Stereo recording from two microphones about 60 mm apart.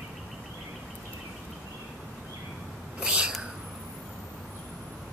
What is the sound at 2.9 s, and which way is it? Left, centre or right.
Whispering, centre.